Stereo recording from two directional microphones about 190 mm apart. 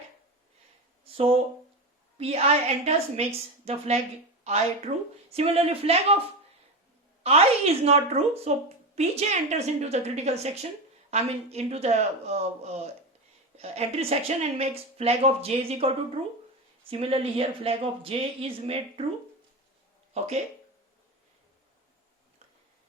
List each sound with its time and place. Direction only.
1.0 s a sound: 30° right (ahead or behind)
2.1 s a woman's voice: 30° right (ahead or behind)
7.2 s a woman's voice: 30° right (ahead or behind)
16.9 s speech: 30° right (ahead or behind)
20.1 s a woman's voice: 35° right (ahead or behind)